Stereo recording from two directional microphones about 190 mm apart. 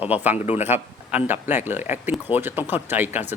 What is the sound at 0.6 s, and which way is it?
Speech, 10° right (ahead or behind).